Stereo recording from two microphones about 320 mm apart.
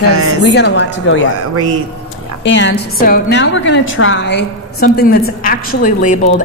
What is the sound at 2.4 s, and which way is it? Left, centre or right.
A woman's voice, left.